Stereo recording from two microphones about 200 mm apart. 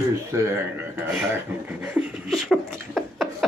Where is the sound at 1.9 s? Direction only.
5° right (ahead or behind).